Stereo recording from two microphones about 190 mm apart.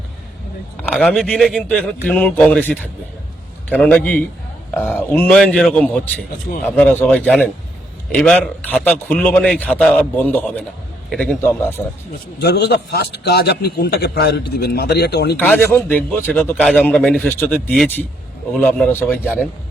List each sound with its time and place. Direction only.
0.8 s a man's voice: 5° left (ahead or behind)
12.4 s a man's voice: 60° left (ahead or behind)
15.4 s a man's voice: 5° left (ahead or behind)